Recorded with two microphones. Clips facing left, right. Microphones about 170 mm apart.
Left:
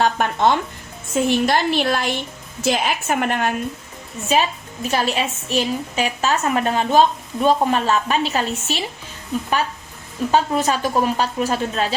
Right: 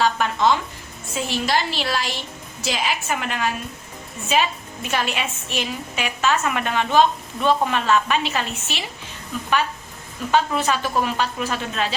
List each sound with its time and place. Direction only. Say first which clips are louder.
0.0 s a woman's voice: left 2 dB; 55° left (ahead or behind)
4.3 s a woman's voice: left 2 dB; 40° left (ahead or behind)
10.3 s a woman's voice: left 1 dB; 40° left (ahead or behind)